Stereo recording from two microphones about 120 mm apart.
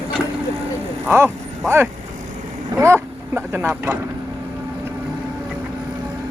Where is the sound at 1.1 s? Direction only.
20° right (ahead or behind).